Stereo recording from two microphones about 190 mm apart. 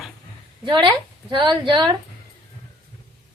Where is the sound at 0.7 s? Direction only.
25° right (ahead or behind).